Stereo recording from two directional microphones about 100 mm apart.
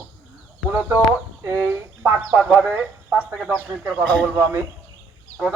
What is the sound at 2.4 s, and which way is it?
Speech, 10° right (ahead or behind).